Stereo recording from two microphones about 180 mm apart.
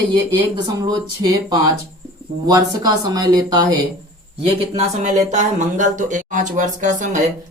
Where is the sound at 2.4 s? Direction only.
20° right (ahead or behind).